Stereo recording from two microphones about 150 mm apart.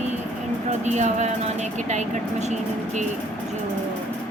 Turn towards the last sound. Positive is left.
turn(degrees=-50)  # may be behind; listen again after turning